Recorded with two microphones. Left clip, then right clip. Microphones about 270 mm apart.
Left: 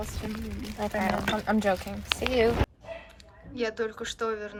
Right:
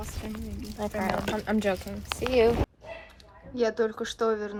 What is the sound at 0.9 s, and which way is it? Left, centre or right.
Speech, centre.